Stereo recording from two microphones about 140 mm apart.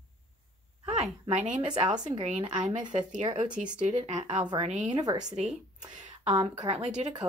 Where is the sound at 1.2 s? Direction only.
50° right (ahead or behind).